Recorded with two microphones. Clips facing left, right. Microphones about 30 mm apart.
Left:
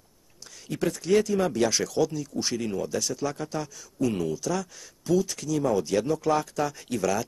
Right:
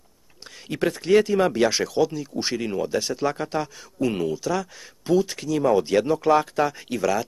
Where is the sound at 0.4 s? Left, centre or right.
Right.